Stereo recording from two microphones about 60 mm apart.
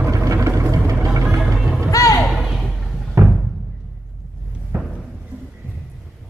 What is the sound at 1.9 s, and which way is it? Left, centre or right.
Music, left.